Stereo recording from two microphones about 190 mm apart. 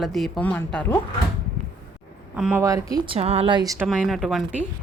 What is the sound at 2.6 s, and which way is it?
Speech, 15° right (ahead or behind).